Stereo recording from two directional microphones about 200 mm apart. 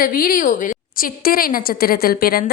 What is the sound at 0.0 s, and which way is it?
A woman's voice, 45° left (ahead or behind).